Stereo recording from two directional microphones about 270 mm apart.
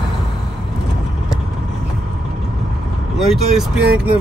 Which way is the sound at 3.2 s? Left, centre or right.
Centre.